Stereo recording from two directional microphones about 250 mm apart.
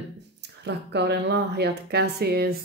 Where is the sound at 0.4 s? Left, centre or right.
Right.